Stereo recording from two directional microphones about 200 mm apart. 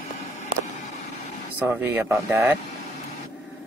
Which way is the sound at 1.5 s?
10° right (ahead or behind).